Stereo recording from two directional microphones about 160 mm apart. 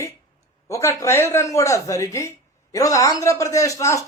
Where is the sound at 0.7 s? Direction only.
20° left (ahead or behind).